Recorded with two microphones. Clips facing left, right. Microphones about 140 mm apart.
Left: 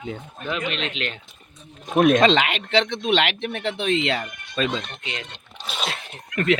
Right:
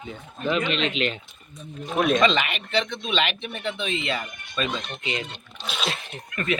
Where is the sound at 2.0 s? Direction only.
60° left (ahead or behind); by 4.7 s 80° left.